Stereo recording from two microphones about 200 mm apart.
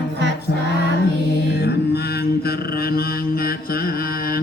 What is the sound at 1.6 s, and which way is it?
Mantra, 55° left (ahead or behind).